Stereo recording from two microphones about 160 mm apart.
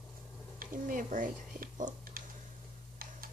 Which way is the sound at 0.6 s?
55° right (ahead or behind).